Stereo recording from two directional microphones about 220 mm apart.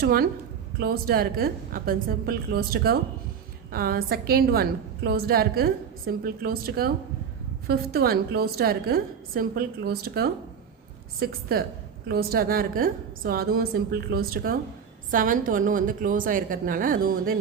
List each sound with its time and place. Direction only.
0.0 s a woman's voice: 40° right (ahead or behind)